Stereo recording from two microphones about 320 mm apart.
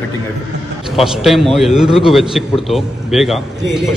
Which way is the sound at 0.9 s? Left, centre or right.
Centre.